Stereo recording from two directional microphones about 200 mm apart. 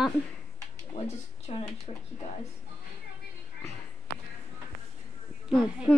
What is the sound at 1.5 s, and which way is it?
Speech, 30° left (ahead or behind).